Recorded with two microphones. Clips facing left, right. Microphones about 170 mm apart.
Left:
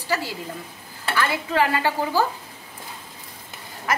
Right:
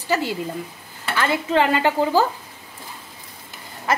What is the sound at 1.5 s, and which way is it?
Speech, 20° right (ahead or behind).